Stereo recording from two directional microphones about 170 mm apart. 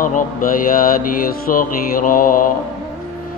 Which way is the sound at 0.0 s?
55° left (ahead or behind).